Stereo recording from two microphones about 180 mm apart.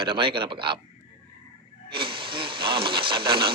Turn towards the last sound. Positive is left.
turn(degrees=-25)  # may be behind; listen again after turning